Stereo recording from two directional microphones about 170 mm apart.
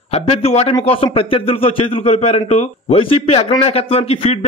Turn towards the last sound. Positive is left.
turn(degrees=35)  # may be behind; listen again after turning